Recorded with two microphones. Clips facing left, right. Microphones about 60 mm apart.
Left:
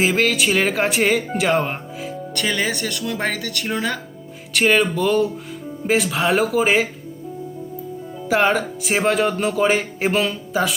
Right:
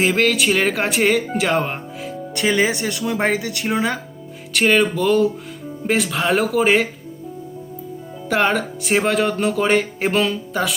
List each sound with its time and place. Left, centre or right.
0.0 s speech: centre
2.3 s speech: centre
4.5 s speech: centre
8.3 s speech: centre